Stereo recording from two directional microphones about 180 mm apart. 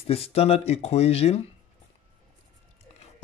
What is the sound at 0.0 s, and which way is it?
Speech, 35° left (ahead or behind).